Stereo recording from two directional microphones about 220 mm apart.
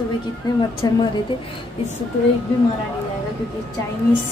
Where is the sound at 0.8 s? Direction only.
15° left (ahead or behind).